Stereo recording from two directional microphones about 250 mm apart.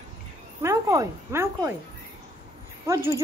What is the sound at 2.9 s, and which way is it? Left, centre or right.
Speech, centre.